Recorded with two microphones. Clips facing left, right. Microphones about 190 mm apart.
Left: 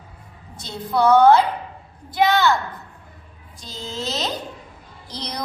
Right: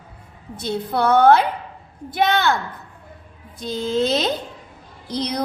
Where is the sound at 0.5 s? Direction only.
60° right (ahead or behind).